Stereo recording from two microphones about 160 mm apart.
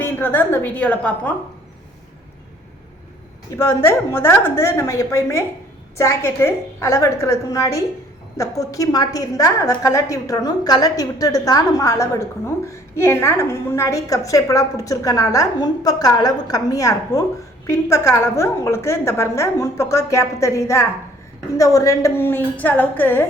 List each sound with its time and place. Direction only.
0.0 s a woman's voice: 10° left (ahead or behind)
3.5 s a woman's voice: 15° left (ahead or behind)